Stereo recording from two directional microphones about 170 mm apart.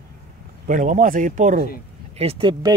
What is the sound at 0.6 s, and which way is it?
Speech, 50° right (ahead or behind).